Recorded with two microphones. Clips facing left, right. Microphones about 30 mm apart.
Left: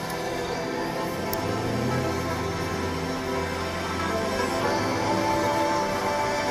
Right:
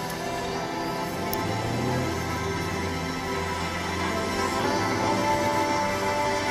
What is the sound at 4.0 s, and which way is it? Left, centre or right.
Music, centre.